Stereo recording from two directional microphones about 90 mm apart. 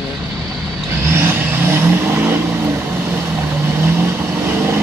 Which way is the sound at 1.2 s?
25° right (ahead or behind).